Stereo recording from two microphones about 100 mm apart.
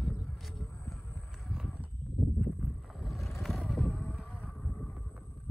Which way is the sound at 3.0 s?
Centre (ahead or behind).